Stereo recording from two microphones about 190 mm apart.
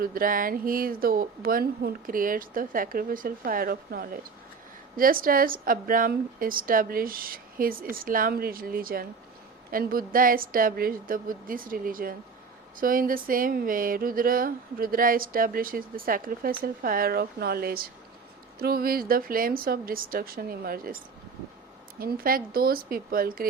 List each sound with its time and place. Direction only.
0.0 s speech: 50° right (ahead or behind)